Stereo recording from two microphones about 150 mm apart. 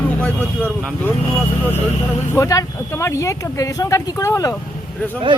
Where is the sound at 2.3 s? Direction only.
20° left (ahead or behind).